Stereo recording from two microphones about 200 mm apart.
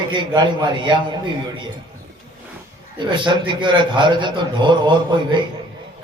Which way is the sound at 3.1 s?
25° right (ahead or behind).